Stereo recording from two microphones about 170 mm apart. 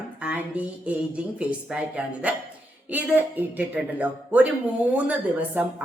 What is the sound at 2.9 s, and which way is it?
A woman's voice, 10° right (ahead or behind).